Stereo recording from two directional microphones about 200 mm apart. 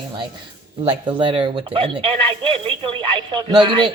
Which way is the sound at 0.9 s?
25° right (ahead or behind).